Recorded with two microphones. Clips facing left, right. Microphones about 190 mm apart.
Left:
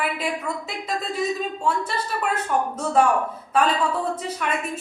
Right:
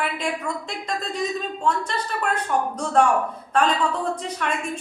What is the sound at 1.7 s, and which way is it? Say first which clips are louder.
A woman's voice: right 1 dB; 5° left (ahead or behind).